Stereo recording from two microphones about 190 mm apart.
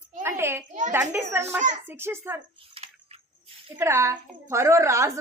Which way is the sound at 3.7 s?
15° right (ahead or behind).